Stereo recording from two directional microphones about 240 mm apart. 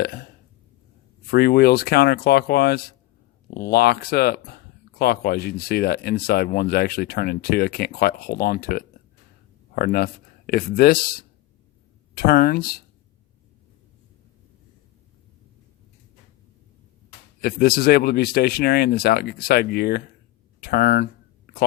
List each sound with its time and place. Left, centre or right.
0.0 s speech: left
1.3 s speech: left
17.4 s speech: left
20.6 s a sound: left